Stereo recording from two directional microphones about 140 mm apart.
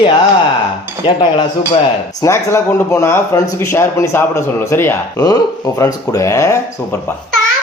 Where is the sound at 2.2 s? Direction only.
20° left (ahead or behind).